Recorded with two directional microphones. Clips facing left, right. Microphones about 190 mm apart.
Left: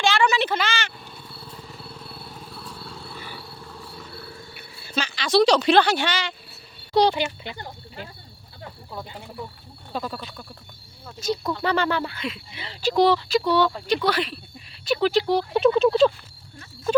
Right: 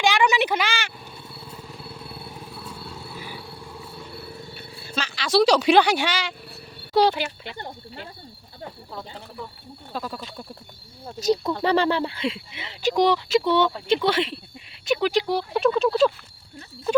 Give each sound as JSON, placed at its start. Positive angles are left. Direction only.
{"t": 0.0, "sound": "vehicle", "side_deg": -15}
{"t": 4.9, "sound": "speech", "side_deg": -5}
{"t": 9.9, "sound": "speech", "side_deg": 0}
{"t": 11.0, "sound": "cricket", "side_deg": -35}
{"t": 11.6, "sound": "speech", "side_deg": -30}
{"t": 14.8, "sound": "speech", "side_deg": -15}